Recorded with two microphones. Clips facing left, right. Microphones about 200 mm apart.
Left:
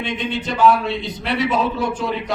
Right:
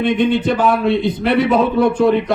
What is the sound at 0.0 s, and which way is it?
A man's voice, 55° right (ahead or behind).